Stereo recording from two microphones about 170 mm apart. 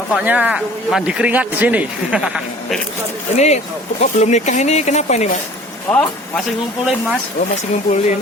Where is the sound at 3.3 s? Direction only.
40° left (ahead or behind).